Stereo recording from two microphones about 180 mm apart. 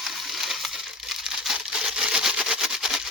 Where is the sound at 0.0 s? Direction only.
Centre (ahead or behind).